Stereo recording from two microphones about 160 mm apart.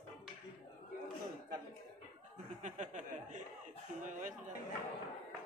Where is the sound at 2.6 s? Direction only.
50° right (ahead or behind).